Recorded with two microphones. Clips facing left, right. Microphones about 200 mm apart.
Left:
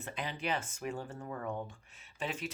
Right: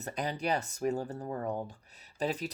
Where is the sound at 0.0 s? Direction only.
40° right (ahead or behind).